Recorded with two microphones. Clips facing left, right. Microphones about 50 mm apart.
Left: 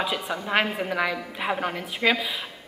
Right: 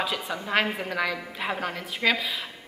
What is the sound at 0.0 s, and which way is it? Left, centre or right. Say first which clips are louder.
A woman's voice: left 2 dB; centre.